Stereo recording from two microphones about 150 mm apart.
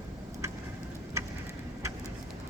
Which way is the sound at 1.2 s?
20° right (ahead or behind).